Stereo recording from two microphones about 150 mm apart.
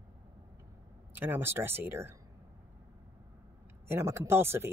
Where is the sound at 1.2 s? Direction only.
15° right (ahead or behind).